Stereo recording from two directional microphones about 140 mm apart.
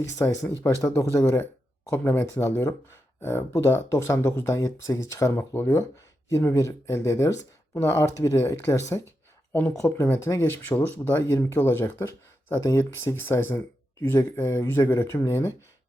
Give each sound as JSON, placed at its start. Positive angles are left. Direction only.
{"t": 0.2, "sound": "speech", "side_deg": 15}